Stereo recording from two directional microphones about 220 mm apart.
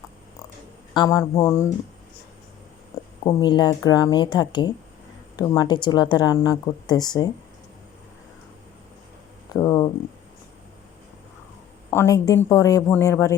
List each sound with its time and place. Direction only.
0.9 s speech: 15° left (ahead or behind)
2.9 s a sound: 15° left (ahead or behind)
3.2 s a woman's voice: 20° left (ahead or behind)
9.5 s speech: 15° left (ahead or behind)
11.9 s speech: 15° left (ahead or behind)